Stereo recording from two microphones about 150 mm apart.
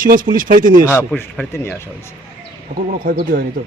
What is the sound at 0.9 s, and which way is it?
Speech, 15° left (ahead or behind).